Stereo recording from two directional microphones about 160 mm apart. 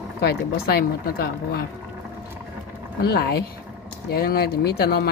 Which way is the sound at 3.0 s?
75° left (ahead or behind).